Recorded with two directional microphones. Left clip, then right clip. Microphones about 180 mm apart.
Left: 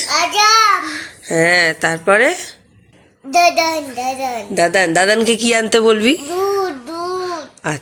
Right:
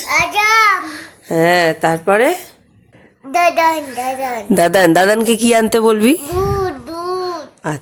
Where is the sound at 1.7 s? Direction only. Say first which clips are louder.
Even; 10° right (ahead or behind).